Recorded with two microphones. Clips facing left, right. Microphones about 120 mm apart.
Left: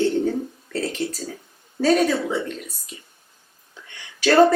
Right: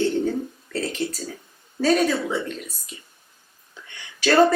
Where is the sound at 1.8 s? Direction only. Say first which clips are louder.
Left 1 dB; 35° left (ahead or behind).